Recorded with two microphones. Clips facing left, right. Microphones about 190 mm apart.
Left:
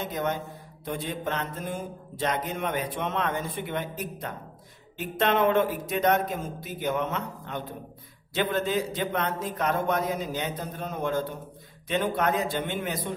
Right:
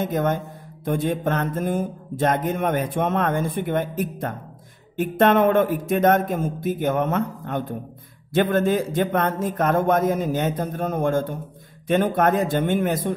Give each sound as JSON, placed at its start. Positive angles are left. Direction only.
{"t": 0.0, "sound": "speech", "side_deg": -50}